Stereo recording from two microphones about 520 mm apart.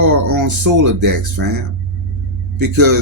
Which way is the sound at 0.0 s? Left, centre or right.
Right.